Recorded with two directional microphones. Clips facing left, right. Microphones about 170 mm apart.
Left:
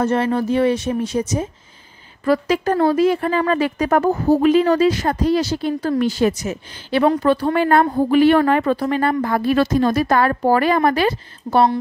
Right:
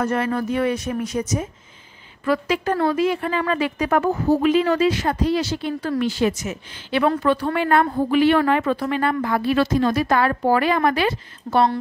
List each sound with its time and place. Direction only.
0.0 s speech: 30° left (ahead or behind)
2.2 s speech: 40° left (ahead or behind)